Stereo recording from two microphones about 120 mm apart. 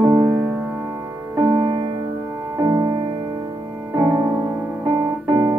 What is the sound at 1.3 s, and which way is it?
Music, 35° right (ahead or behind).